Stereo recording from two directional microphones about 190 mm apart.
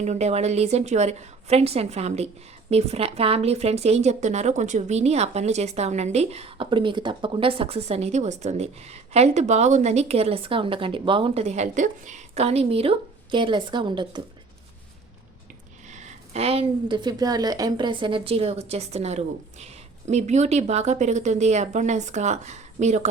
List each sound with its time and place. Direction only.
0.0 s a woman's voice: 35° right (ahead or behind)
15.9 s a woman's voice: 40° right (ahead or behind)